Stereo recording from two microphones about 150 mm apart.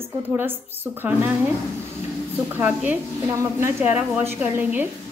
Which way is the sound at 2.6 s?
10° right (ahead or behind).